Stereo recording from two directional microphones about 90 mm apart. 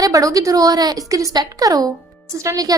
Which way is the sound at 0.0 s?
40° right (ahead or behind).